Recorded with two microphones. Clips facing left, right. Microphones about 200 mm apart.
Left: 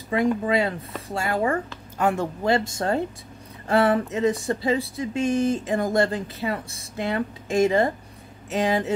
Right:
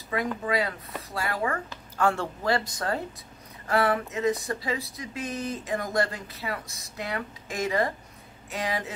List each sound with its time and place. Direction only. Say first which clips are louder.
0.1 s speech: left 6 dB; 25° left (ahead or behind)
2.0 s speech: left 3 dB; 20° left (ahead or behind)